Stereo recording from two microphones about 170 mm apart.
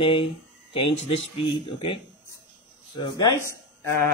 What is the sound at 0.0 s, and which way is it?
Speech, 30° left (ahead or behind).